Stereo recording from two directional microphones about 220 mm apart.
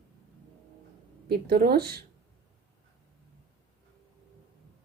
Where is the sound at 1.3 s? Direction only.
45° right (ahead or behind).